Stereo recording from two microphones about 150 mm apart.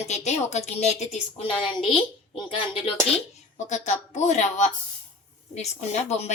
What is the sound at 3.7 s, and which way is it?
A woman's voice, 50° left (ahead or behind).